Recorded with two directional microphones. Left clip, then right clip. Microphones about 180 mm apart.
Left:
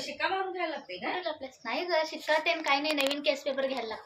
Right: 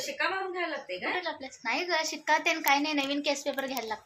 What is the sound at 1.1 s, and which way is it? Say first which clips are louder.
A child's voice: right 1 dB; 25° right (ahead or behind).